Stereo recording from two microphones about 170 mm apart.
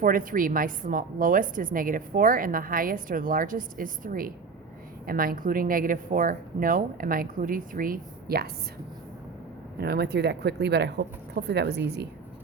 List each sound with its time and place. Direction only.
0.0 s a woman's voice: 55° right (ahead or behind)
9.7 s speech: 70° right (ahead or behind)